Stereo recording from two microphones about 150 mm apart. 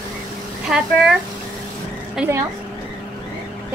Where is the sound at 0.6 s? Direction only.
5° right (ahead or behind).